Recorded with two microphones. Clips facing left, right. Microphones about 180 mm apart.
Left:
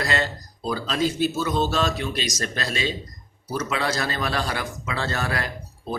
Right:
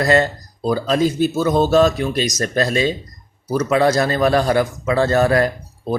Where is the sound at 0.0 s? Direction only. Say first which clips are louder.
Right 10 dB; 45° right (ahead or behind).